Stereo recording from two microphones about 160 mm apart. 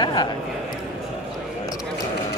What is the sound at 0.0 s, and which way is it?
Speech, 25° left (ahead or behind).